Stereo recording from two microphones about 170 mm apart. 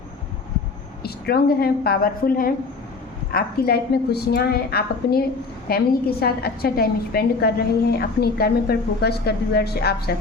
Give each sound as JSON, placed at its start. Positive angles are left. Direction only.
{"t": 1.0, "sound": "a woman's voice", "side_deg": 65}